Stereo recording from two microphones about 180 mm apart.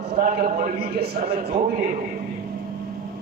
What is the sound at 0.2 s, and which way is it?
A man's voice, 50° right (ahead or behind).